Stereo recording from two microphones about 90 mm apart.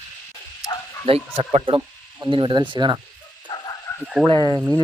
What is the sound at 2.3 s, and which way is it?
Speech, 60° right (ahead or behind).